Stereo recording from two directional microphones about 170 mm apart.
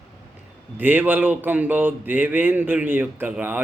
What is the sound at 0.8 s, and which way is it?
Speech, 10° right (ahead or behind).